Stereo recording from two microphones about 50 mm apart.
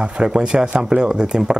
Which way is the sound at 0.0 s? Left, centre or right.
Centre.